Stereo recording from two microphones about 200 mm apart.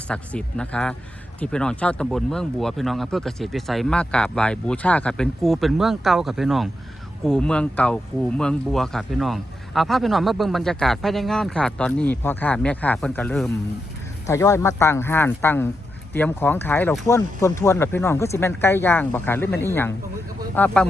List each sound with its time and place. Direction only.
0.1 s speech: 5° left (ahead or behind)